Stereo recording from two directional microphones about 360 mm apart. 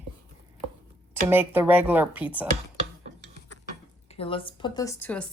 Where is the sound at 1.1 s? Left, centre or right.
Centre.